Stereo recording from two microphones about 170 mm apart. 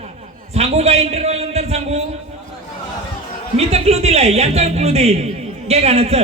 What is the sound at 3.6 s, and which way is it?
A man's voice, 40° right (ahead or behind).